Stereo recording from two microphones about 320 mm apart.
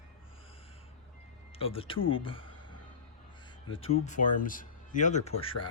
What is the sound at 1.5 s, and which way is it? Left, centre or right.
Speech, centre.